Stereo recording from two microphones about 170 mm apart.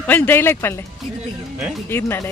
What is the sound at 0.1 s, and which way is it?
Speech, 10° left (ahead or behind).